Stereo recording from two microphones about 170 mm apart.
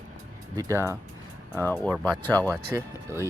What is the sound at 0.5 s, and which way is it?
Speech, 15° right (ahead or behind).